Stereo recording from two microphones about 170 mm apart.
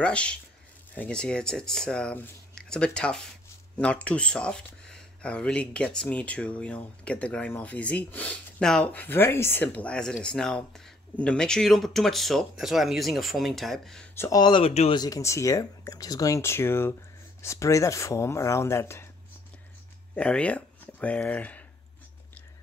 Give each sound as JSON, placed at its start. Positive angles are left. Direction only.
{"t": 0.0, "sound": "speech", "side_deg": 5}
{"t": 14.1, "sound": "speech", "side_deg": 20}
{"t": 15.0, "sound": "speech", "side_deg": 20}
{"t": 20.2, "sound": "speech", "side_deg": 5}